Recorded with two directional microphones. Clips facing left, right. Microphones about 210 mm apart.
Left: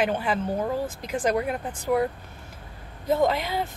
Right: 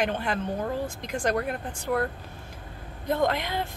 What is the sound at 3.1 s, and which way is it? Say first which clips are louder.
Speech: left 3 dB; 5° left (ahead or behind).